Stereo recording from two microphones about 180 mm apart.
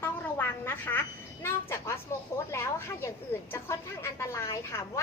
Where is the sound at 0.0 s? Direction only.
10° left (ahead or behind).